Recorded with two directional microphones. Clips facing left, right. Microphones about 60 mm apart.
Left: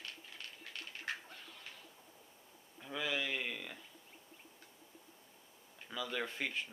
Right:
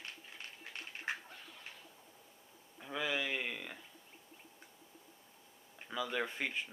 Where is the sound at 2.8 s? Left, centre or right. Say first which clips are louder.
Right 1 dB; centre.